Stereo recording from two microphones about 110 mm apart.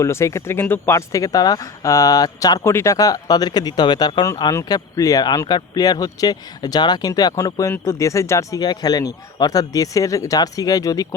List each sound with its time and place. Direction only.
0.0 s speech: 25° left (ahead or behind)